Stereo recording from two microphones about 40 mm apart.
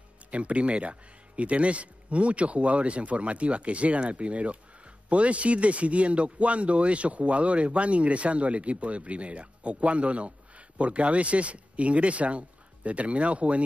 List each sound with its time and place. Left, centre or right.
0.3 s speech: right